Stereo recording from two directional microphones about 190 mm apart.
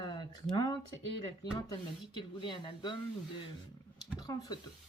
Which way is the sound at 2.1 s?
25° left (ahead or behind).